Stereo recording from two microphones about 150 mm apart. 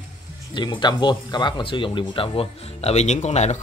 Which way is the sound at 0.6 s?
30° left (ahead or behind).